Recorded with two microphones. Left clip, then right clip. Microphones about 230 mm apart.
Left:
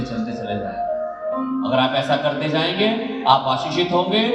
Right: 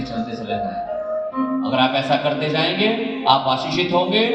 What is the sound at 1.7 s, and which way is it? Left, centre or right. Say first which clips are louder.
A man's voice: even; left.